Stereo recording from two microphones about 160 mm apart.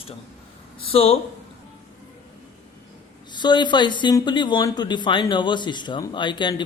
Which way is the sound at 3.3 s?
30° left (ahead or behind).